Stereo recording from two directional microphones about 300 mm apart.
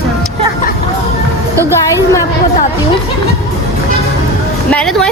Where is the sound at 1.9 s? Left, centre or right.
Centre.